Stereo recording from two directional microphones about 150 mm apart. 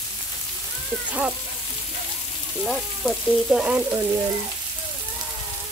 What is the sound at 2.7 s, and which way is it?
Speech, centre (ahead or behind).